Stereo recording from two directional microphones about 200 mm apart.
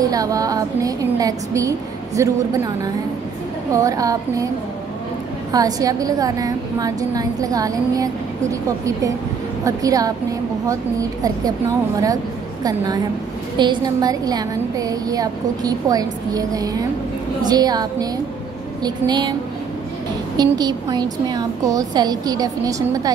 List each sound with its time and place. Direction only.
0.0 s a woman's voice: 20° right (ahead or behind)
5.5 s a woman's voice: 20° right (ahead or behind)
12.6 s a woman's voice: 20° right (ahead or behind)
20.3 s a woman's voice: 20° right (ahead or behind)